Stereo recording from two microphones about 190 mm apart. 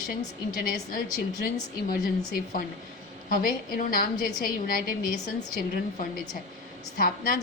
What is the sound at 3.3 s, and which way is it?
A woman's voice, 50° left (ahead or behind).